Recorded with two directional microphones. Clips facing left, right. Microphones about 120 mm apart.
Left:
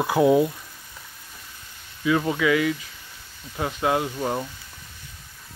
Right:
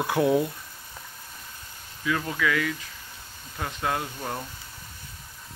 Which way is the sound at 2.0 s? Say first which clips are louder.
Left 5 dB; 20° left (ahead or behind).